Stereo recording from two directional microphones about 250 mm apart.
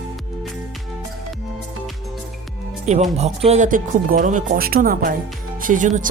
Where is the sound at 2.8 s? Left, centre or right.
Right.